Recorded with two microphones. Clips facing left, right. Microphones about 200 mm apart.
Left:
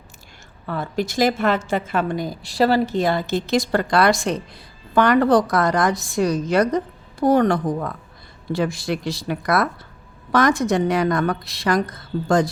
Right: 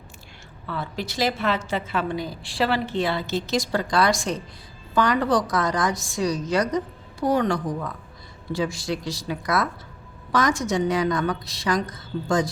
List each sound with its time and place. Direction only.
0.7 s a woman's voice: 50° left (ahead or behind)